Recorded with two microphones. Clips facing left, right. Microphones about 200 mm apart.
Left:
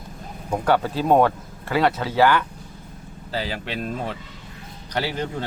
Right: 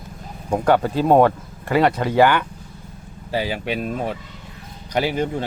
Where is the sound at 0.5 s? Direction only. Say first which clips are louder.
Right 3 dB; 10° right (ahead or behind).